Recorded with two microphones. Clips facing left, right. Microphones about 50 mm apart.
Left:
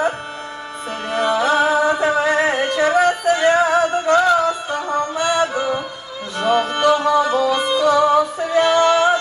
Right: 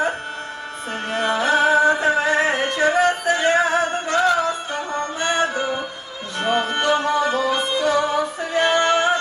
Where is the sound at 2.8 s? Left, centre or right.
Left.